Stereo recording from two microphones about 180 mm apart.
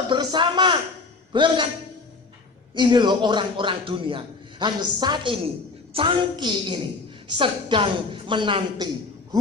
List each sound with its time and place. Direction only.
0.1 s a man's voice: 25° right (ahead or behind)
2.7 s a man's voice: 25° right (ahead or behind)